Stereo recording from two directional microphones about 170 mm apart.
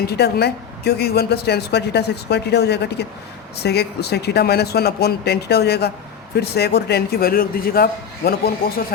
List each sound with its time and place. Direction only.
0.0 s a woman's voice: 70° left (ahead or behind)